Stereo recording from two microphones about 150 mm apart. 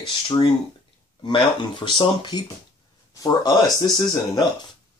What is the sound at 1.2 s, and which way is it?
Speech, 30° left (ahead or behind).